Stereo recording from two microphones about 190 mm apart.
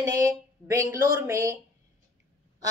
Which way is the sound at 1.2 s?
15° right (ahead or behind).